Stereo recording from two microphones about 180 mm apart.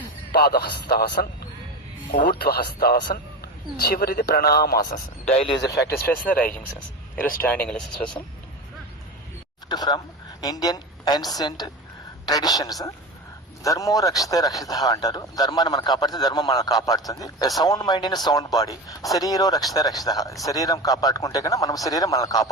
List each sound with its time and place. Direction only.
0.3 s a man's voice: 60° left (ahead or behind)
2.4 s a man's voice: 60° left (ahead or behind)
6.2 s speech: 10° left (ahead or behind)
9.6 s a man's voice: 20° left (ahead or behind)